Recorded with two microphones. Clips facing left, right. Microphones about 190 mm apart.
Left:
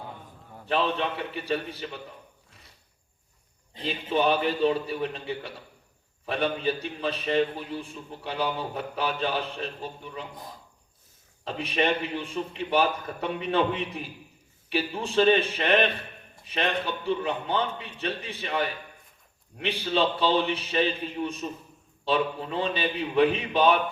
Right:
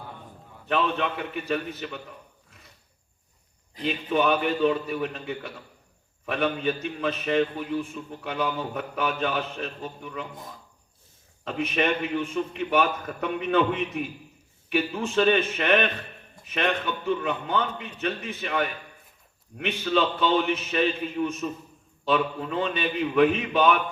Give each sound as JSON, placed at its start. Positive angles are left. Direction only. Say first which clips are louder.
{"t": 0.7, "sound": "a man's voice", "louder": "right 1 dB", "side_deg": 30}
{"t": 3.8, "sound": "a man's voice", "louder": "right 2 dB", "side_deg": 30}
{"t": 11.4, "sound": "a man's voice", "louder": "right 1 dB", "side_deg": 35}